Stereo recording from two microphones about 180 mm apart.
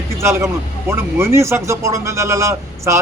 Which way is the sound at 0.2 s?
15° right (ahead or behind).